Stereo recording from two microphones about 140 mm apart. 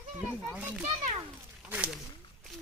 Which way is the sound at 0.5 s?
10° right (ahead or behind).